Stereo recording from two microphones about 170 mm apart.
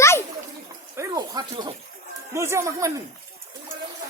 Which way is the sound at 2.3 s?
15° right (ahead or behind).